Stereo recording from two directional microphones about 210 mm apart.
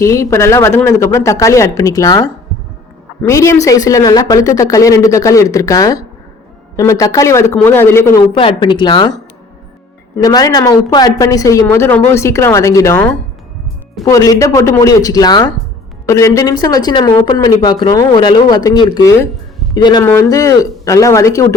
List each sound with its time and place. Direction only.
0.0 s speech: 15° left (ahead or behind)
8.3 s speech: 25° left (ahead or behind)
10.2 s speech: 15° left (ahead or behind)